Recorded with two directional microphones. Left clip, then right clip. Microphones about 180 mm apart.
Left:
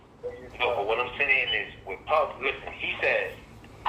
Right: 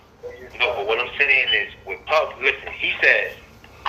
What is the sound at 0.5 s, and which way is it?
A man's voice, 30° right (ahead or behind).